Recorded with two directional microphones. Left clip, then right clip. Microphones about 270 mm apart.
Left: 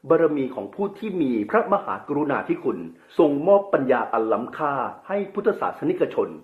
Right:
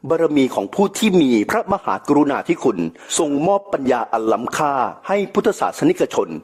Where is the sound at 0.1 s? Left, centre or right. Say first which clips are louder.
Right 3 dB; right.